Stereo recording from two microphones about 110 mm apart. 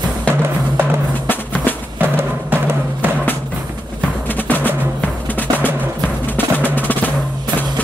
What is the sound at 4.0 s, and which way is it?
Music, 15° left (ahead or behind).